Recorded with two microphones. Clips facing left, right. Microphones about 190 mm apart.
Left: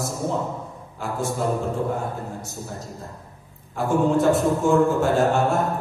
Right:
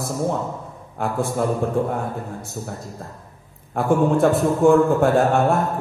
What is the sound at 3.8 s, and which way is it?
A man's voice, 55° right (ahead or behind).